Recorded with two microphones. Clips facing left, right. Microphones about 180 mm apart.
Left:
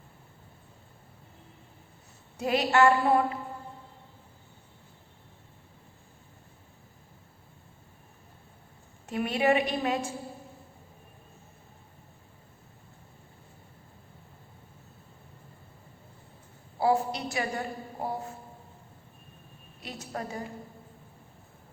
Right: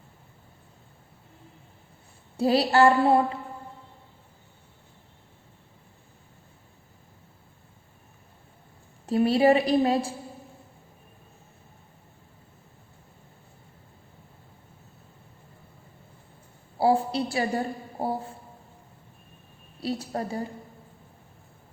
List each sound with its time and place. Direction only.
2.4 s a woman's voice: 35° right (ahead or behind)
9.0 s a woman's voice: 35° right (ahead or behind)
16.7 s a woman's voice: 30° right (ahead or behind)
19.8 s a woman's voice: 35° right (ahead or behind)